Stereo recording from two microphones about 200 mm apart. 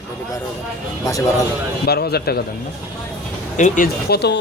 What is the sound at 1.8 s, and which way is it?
Speech, 55° left (ahead or behind).